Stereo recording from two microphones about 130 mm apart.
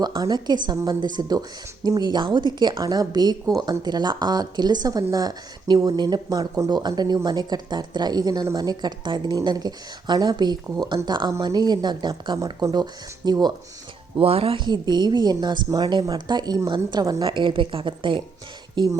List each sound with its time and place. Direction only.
0.0 s speech: 30° right (ahead or behind)
14.2 s speech: 50° right (ahead or behind)